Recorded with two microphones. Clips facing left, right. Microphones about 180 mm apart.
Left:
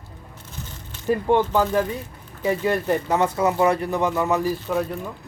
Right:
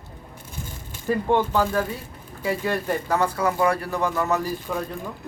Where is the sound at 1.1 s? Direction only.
15° left (ahead or behind).